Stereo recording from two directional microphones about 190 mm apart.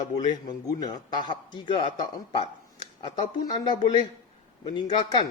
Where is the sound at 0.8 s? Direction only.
20° left (ahead or behind).